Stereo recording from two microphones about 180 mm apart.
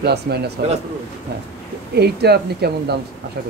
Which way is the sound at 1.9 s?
65° right (ahead or behind).